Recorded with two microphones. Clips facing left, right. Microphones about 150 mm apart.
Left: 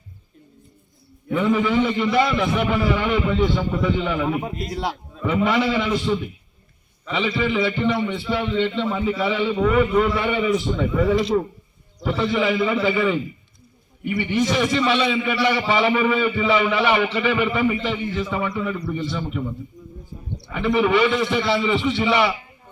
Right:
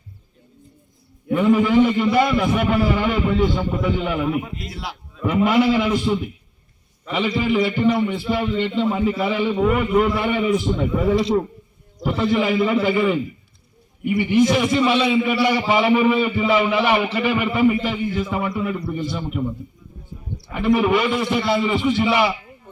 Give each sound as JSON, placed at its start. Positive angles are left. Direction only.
{"t": 1.3, "sound": "a man's voice", "side_deg": -10}
{"t": 4.3, "sound": "a man's voice", "side_deg": 40}
{"t": 5.2, "sound": "a man's voice", "side_deg": -5}
{"t": 7.3, "sound": "a man's voice", "side_deg": -5}
{"t": 20.5, "sound": "a man's voice", "side_deg": -5}